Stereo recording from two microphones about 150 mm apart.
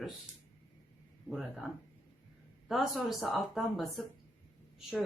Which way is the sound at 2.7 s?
Centre (ahead or behind).